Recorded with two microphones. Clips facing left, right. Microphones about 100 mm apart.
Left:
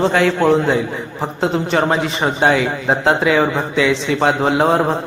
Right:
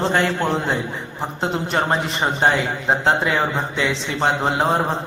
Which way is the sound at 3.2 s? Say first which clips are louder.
Left 5 dB; 90° left.